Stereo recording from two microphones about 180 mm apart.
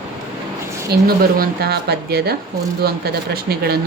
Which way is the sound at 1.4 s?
60° right (ahead or behind).